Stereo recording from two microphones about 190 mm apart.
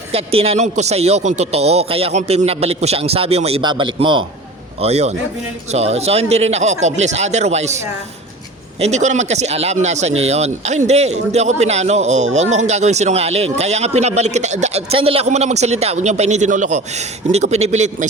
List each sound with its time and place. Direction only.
0.1 s speech: 30° right (ahead or behind)
8.8 s speech: 40° right (ahead or behind)